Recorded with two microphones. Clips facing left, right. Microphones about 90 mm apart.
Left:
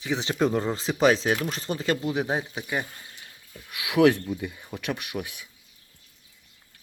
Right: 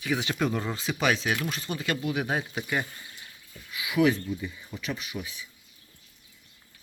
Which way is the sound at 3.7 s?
75° left (ahead or behind).